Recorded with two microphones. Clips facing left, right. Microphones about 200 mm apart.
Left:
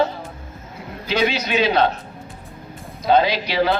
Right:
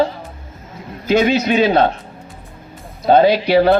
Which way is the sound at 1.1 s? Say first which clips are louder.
Right 7 dB; 50° right (ahead or behind).